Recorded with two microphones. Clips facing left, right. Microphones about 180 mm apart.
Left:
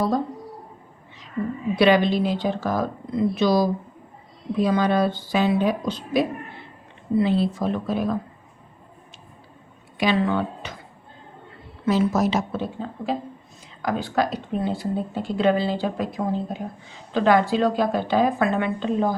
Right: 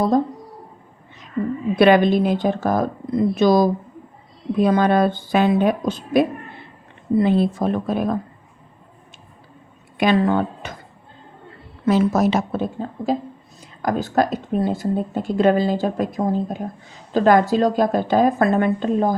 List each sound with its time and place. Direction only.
1.7 s speech: 50° right (ahead or behind)
10.0 s speech: 50° right (ahead or behind)
11.9 s speech: 55° right (ahead or behind)